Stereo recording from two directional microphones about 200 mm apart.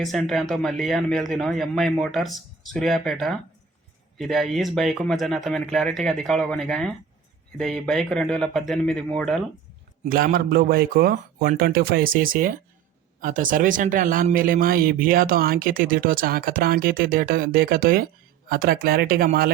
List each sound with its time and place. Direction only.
0.0 s speech: centre (ahead or behind)
10.0 s speech: 45° right (ahead or behind)